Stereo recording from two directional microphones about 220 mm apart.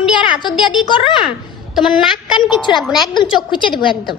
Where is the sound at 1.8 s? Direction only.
Centre (ahead or behind).